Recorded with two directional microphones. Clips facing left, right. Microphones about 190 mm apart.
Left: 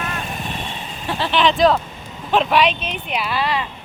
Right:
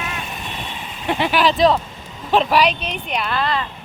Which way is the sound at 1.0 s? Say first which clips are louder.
Right 3 dB; 15° right (ahead or behind).